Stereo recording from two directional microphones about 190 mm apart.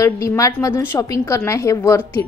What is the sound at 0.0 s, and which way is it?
A woman's voice, 15° left (ahead or behind).